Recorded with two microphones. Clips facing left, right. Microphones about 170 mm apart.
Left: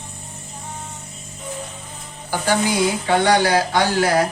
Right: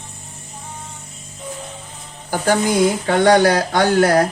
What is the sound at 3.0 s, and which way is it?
Speech, 45° right (ahead or behind).